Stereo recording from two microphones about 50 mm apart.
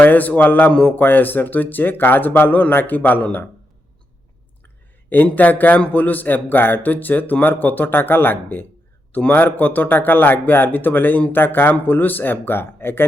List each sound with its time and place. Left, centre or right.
0.0 s speech: left
0.7 s speech: left
0.9 s speech: left
5.0 s speech: left